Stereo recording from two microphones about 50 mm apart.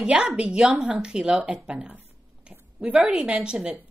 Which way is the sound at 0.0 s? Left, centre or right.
Right.